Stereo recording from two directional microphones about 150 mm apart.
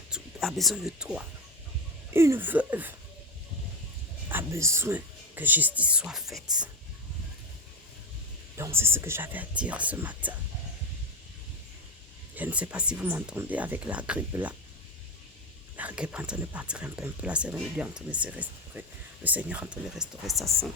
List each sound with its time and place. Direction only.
0.1 s speech: centre (ahead or behind)
2.1 s speech: 15° right (ahead or behind)
4.3 s speech: 15° right (ahead or behind)
8.5 s speech: 20° right (ahead or behind)
12.3 s speech: 10° right (ahead or behind)
15.8 s speech: 10° right (ahead or behind)
20.4 s speech: 20° right (ahead or behind)